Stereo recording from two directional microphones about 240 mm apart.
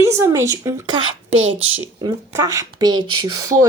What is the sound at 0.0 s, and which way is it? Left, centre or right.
A woman's voice, centre.